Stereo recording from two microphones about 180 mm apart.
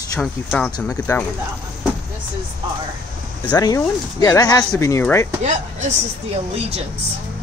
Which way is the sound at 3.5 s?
20° left (ahead or behind).